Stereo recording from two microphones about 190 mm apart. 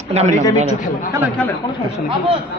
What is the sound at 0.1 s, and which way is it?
Speech, 35° right (ahead or behind).